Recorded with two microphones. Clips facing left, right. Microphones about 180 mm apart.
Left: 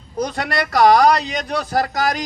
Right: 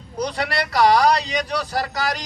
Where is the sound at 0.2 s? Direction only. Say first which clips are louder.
Left 2 dB; 50° left (ahead or behind).